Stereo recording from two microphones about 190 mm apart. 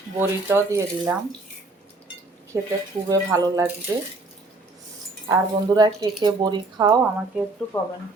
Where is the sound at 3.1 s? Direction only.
15° right (ahead or behind).